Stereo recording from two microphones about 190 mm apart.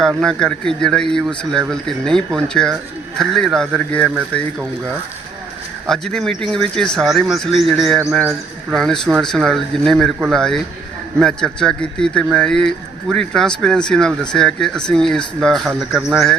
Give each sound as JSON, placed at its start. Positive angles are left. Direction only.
{"t": 0.2, "sound": "speech", "side_deg": 5}
{"t": 5.9, "sound": "speech", "side_deg": 0}